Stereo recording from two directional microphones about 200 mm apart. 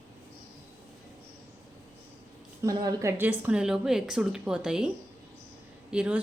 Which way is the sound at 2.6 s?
20° right (ahead or behind).